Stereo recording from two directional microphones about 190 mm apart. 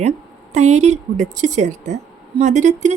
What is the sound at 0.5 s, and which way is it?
Speech, 35° right (ahead or behind).